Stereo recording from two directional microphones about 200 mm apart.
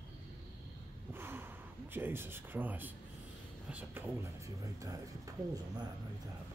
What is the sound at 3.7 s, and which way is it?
A man's voice, 15° right (ahead or behind).